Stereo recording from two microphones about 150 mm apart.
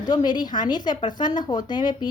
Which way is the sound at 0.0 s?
30° left (ahead or behind).